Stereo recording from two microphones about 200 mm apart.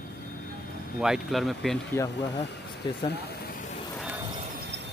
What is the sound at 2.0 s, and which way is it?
Speech, 15° left (ahead or behind).